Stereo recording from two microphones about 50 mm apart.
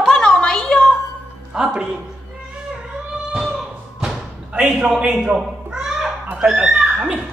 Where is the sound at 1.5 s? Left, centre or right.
Centre.